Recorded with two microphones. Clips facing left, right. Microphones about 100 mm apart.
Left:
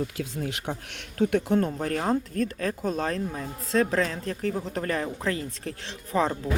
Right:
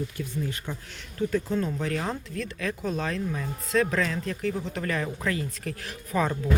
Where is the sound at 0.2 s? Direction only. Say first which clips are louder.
Left 1 dB; 80° left.